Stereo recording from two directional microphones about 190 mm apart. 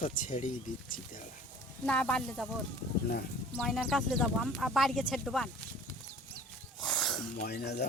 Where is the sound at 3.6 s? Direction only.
Centre (ahead or behind).